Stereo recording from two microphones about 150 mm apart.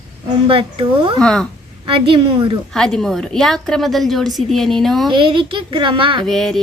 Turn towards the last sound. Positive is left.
turn(degrees=0)  # may be behind; listen again after turning